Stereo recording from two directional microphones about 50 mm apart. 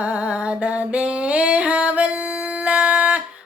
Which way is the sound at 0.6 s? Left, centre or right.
Right.